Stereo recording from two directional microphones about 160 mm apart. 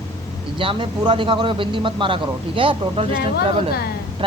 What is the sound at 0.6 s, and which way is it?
Speech, 30° right (ahead or behind).